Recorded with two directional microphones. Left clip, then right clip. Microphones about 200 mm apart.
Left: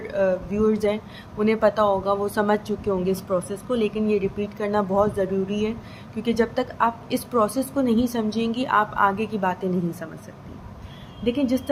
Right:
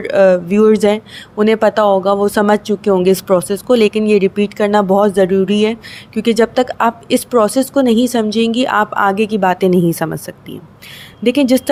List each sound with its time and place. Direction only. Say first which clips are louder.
0.0 s speech: right 12 dB; 45° right (ahead or behind)